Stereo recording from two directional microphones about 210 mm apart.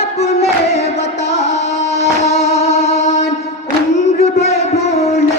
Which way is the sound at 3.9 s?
30° left (ahead or behind).